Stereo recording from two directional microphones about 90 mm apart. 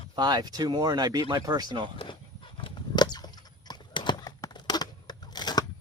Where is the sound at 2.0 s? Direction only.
70° left (ahead or behind).